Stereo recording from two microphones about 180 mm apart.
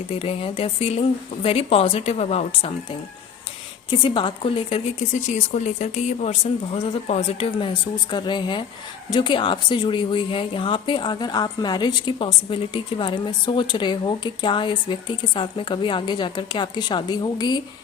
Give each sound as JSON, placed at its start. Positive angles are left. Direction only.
{"t": 0.1, "sound": "speech", "side_deg": 30}
{"t": 3.8, "sound": "speech", "side_deg": 25}
{"t": 5.3, "sound": "speech", "side_deg": 40}